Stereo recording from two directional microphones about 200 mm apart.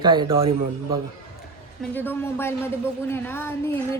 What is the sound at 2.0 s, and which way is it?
A woman's voice, 10° left (ahead or behind).